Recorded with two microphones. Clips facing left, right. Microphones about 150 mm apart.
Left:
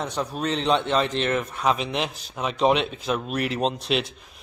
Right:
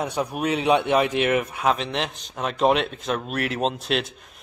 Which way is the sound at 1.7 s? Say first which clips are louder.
Even; 5° left (ahead or behind).